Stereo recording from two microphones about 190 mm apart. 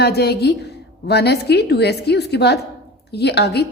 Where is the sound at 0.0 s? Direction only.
60° left (ahead or behind).